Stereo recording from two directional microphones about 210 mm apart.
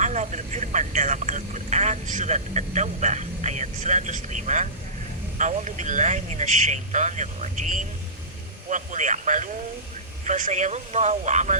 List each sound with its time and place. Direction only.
0.0 s speech: 35° right (ahead or behind)